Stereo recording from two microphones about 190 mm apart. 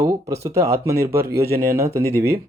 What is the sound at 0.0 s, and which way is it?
Speech, 20° right (ahead or behind).